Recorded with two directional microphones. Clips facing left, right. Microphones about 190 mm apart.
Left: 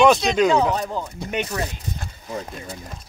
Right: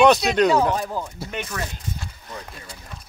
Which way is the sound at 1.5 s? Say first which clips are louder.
Left 3 dB; 20° left (ahead or behind).